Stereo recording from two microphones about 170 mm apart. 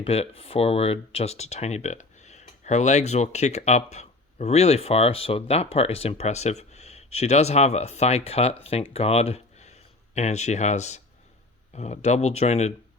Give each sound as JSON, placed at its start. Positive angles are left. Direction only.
{"t": 0.0, "sound": "speech", "side_deg": 35}